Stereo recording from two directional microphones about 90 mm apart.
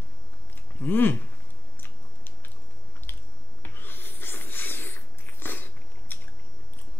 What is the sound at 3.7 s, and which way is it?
Sniff, 25° left (ahead or behind).